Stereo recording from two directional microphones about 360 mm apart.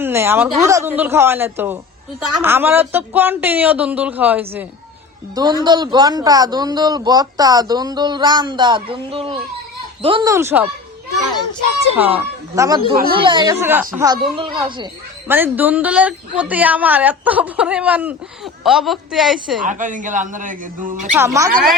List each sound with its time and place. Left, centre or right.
0.0 s a woman's voice: centre
11.9 s a man's voice: centre
19.6 s a man's voice: right
21.1 s a man's voice: centre